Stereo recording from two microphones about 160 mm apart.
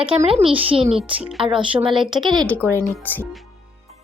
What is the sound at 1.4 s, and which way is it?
Speech, 35° right (ahead or behind).